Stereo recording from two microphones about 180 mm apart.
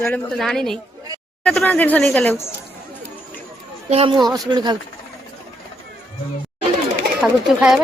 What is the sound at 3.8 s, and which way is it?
Speech, 35° right (ahead or behind).